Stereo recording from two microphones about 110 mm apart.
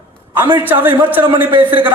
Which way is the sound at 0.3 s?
20° right (ahead or behind).